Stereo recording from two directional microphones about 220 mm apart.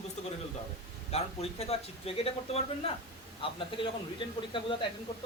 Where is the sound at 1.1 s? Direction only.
30° left (ahead or behind).